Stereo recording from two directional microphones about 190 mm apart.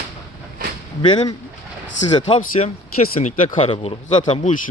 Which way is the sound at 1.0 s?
25° left (ahead or behind).